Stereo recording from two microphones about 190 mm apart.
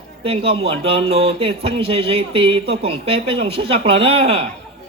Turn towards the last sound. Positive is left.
turn(degrees=-30)  # may be behind; listen again after turning